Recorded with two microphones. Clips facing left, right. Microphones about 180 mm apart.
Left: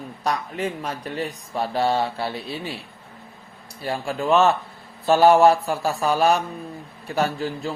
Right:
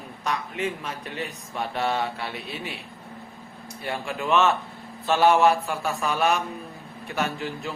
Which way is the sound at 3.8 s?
35° left (ahead or behind).